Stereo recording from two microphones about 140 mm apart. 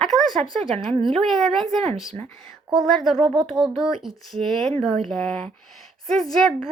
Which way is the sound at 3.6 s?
30° right (ahead or behind).